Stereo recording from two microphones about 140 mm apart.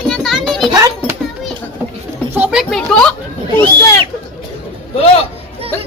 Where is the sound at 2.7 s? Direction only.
5° left (ahead or behind).